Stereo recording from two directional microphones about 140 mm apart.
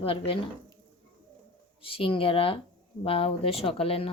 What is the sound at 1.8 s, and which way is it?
A woman's voice, 40° left (ahead or behind).